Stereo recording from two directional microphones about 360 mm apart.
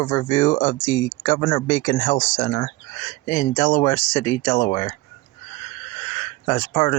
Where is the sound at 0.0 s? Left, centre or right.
Left.